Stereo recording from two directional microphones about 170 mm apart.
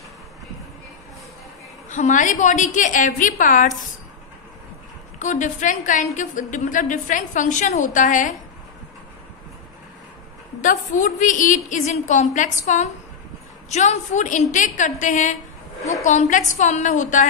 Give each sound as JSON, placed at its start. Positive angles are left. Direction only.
{"t": 1.9, "sound": "a woman's voice", "side_deg": 45}
{"t": 5.2, "sound": "a woman's voice", "side_deg": 45}
{"t": 10.6, "sound": "a woman's voice", "side_deg": 50}
{"t": 15.8, "sound": "a woman's voice", "side_deg": 20}
{"t": 16.1, "sound": "a woman's voice", "side_deg": 45}